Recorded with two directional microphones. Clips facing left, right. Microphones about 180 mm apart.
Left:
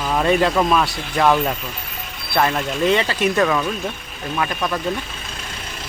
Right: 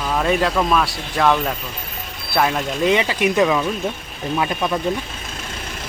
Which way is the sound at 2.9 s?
15° right (ahead or behind).